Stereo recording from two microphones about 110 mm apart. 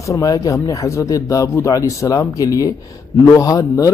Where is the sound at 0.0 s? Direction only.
30° left (ahead or behind).